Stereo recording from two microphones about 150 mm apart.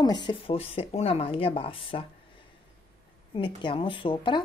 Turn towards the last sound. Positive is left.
turn(degrees=35)  # may be behind; listen again after turning